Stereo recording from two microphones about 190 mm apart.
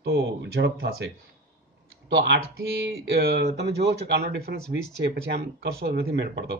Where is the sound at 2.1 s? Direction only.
65° right (ahead or behind).